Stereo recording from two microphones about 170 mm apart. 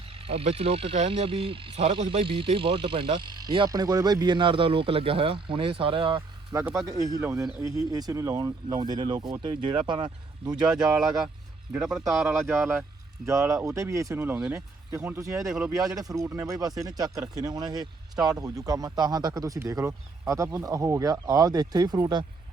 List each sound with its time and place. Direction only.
0.1 s speech: 35° right (ahead or behind)
10.7 s speech: 5° right (ahead or behind)
12.3 s speech: 15° right (ahead or behind)
15.4 s speech: centre (ahead or behind)
16.0 s speech: 20° right (ahead or behind)